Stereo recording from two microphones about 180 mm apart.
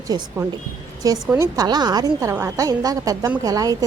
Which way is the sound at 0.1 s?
20° right (ahead or behind).